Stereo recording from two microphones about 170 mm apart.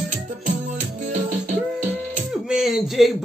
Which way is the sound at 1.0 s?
50° right (ahead or behind).